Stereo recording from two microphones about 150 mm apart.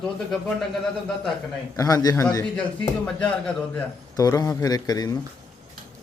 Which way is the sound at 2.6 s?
10° left (ahead or behind).